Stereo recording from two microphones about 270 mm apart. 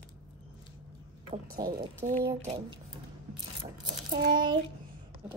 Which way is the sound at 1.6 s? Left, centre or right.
Right.